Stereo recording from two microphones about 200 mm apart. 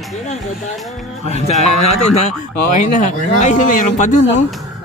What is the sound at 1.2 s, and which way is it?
Speech, 30° left (ahead or behind).